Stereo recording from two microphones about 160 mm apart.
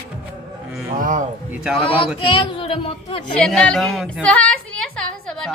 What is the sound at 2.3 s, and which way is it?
Speech, 30° left (ahead or behind).